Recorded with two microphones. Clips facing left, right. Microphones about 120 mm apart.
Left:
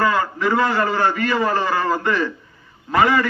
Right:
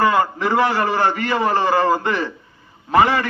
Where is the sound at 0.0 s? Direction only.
20° right (ahead or behind).